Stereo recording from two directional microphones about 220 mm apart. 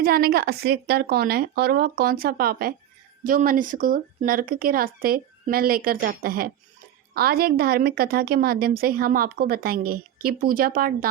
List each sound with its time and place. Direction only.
0.0 s a woman's voice: 45° right (ahead or behind)